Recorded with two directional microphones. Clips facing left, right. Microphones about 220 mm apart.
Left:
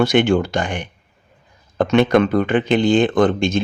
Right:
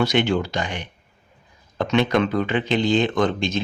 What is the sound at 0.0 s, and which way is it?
Speech, 50° left (ahead or behind).